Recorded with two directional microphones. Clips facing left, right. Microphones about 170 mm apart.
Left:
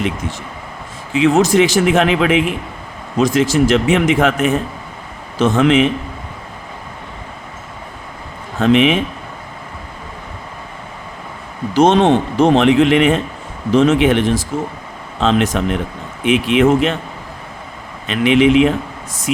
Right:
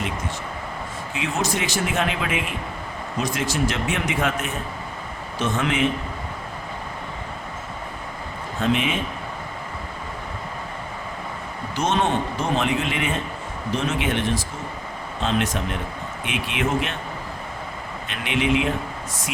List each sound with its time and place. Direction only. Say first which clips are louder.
1.1 s speech: left 14 dB; 90° left
8.5 s speech: left 10 dB; 90° left
11.7 s speech: left 11 dB; 90° left
18.1 s speech: left 11 dB; 90° left